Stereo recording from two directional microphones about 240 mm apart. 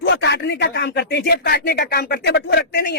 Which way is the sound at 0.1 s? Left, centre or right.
Left.